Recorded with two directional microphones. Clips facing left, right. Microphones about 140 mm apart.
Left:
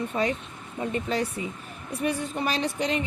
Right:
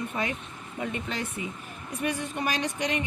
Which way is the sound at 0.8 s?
35° left (ahead or behind).